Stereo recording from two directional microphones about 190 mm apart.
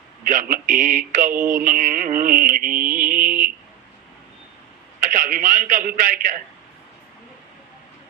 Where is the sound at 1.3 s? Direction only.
10° right (ahead or behind).